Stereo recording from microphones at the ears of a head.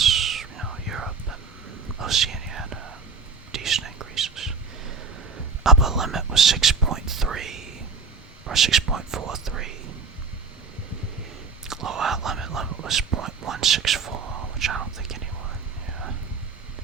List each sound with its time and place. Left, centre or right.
0.0 s owl: right
2.0 s whispering: right
6.1 s whispering: right
11.7 s whispering: right